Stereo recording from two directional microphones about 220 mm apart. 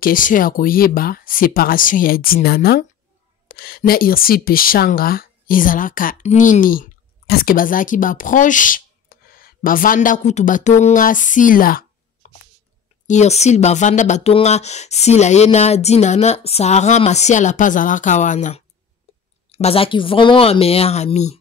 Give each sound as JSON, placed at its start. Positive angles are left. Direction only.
{"t": 0.0, "sound": "speech", "side_deg": 40}